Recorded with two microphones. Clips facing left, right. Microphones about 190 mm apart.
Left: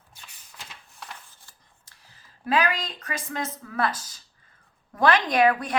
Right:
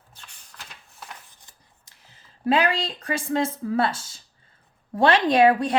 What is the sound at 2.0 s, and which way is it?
A woman's voice, 30° right (ahead or behind).